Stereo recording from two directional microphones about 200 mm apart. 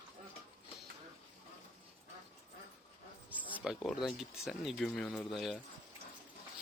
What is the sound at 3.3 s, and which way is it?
Speech, 10° right (ahead or behind).